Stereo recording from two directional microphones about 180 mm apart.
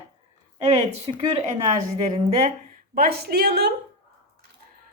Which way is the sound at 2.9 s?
55° right (ahead or behind).